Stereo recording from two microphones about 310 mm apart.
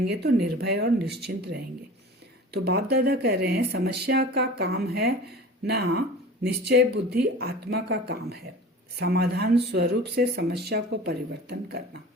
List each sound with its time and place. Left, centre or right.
0.4 s speech: right